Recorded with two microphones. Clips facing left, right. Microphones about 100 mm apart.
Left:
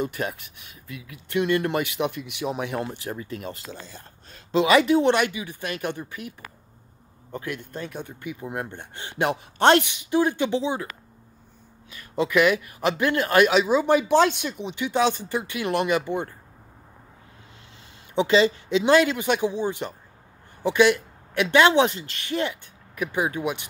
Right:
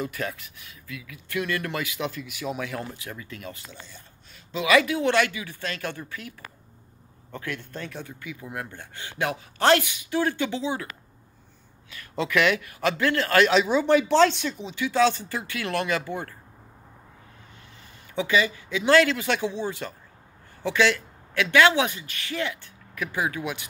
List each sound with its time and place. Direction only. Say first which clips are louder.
0.0 s speech: left 3 dB; 25° left (ahead or behind)
7.3 s speech: left 2 dB; 15° left (ahead or behind)
12.2 s speech: left 3 dB; 10° left (ahead or behind)
18.1 s speech: left 5 dB; 25° left (ahead or behind)